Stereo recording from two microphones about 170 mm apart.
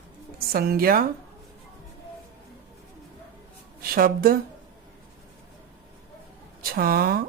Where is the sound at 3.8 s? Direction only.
60° right (ahead or behind).